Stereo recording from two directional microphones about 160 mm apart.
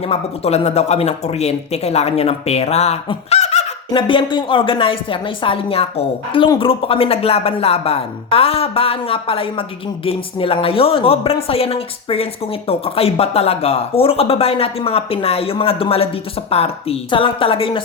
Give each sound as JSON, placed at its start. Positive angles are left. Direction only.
{"t": 0.1, "sound": "speech", "side_deg": 40}